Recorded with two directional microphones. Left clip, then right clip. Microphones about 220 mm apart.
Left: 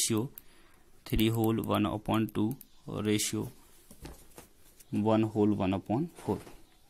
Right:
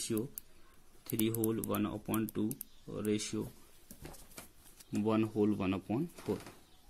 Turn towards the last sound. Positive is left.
turn(degrees=20)  # may be behind; listen again after turning